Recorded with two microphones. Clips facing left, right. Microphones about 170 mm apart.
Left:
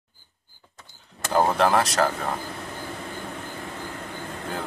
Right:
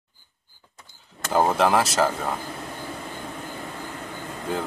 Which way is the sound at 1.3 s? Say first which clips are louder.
Even; 5° right (ahead or behind).